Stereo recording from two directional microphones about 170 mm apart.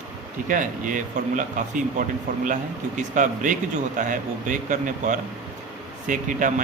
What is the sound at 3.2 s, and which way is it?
Speech, 50° right (ahead or behind).